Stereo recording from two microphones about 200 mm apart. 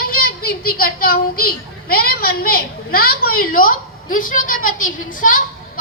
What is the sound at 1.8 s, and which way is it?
A woman's voice, 50° left (ahead or behind).